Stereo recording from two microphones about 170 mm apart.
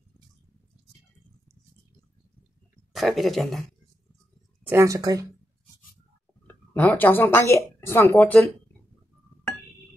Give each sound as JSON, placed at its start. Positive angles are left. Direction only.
{"t": 2.9, "sound": "speech", "side_deg": 0}
{"t": 4.6, "sound": "speech", "side_deg": -15}
{"t": 6.4, "sound": "speech", "side_deg": 10}